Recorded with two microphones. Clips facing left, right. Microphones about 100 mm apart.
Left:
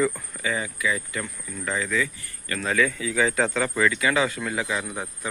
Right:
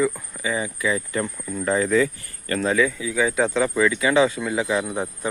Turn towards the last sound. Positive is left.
turn(degrees=-20)  # may be behind; listen again after turning